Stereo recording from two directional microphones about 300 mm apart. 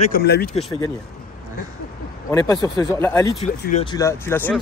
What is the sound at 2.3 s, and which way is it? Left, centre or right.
Speech, centre.